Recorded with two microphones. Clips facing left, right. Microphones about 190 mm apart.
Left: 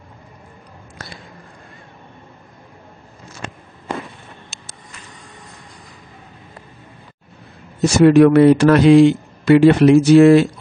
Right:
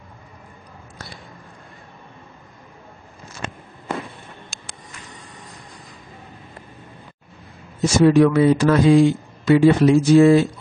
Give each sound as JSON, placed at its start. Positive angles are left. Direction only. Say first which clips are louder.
{"t": 7.8, "sound": "a man's voice", "louder": "left 4 dB", "side_deg": 70}